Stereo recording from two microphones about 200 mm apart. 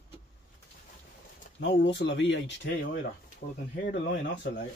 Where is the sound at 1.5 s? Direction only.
65° left (ahead or behind).